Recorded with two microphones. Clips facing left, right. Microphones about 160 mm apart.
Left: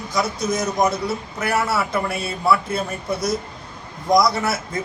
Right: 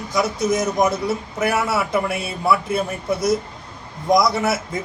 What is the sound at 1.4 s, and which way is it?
A man's voice, 20° right (ahead or behind).